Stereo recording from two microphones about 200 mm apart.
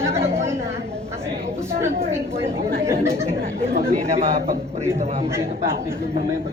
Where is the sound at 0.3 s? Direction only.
15° right (ahead or behind).